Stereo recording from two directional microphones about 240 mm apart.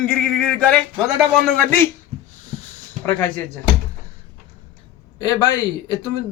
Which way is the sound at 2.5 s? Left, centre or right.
Left.